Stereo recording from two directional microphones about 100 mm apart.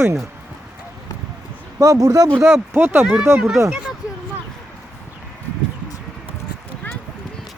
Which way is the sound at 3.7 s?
10° right (ahead or behind).